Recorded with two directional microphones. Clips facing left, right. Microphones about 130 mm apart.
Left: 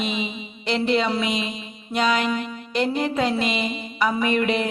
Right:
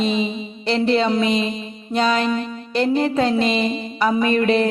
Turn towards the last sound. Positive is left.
turn(degrees=-35)  # may be behind; listen again after turning